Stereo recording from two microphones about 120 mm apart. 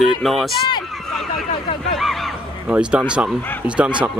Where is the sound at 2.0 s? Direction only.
Centre (ahead or behind).